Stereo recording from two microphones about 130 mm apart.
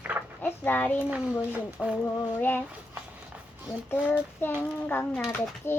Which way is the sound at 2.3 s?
15° left (ahead or behind).